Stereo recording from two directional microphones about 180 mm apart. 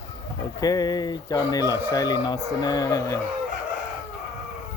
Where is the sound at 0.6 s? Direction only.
20° left (ahead or behind).